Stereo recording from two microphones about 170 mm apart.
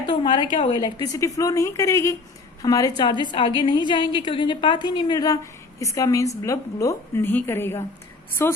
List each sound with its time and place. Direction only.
0.0 s a woman's voice: 30° left (ahead or behind)